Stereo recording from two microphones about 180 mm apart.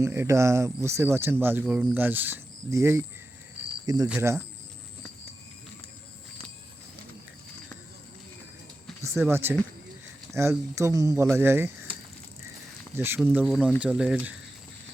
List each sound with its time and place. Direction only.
0.0 s speech: 15° right (ahead or behind)
9.0 s speech: 15° right (ahead or behind)
13.0 s speech: 10° right (ahead or behind)